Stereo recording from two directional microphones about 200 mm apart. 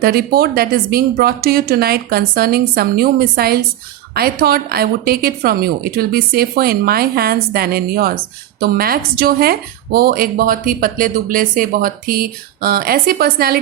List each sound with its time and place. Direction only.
0.0 s speech: 50° right (ahead or behind)